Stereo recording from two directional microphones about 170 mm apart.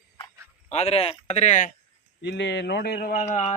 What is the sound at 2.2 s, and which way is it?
Speech, 90° left.